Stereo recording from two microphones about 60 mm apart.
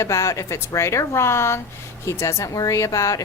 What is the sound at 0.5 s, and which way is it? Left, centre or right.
A woman's voice, left.